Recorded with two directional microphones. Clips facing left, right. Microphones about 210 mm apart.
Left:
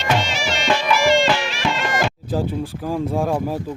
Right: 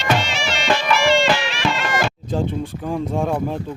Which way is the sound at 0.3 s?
45° left (ahead or behind).